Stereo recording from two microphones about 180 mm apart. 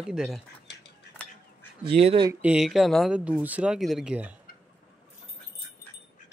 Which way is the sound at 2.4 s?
5° right (ahead or behind).